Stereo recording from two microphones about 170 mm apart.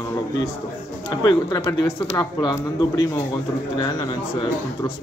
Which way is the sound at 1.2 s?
20° left (ahead or behind).